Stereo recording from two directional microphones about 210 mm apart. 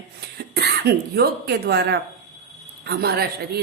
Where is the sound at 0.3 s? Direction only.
50° right (ahead or behind).